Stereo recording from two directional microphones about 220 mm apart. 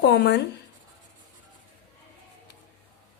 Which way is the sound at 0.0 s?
50° left (ahead or behind).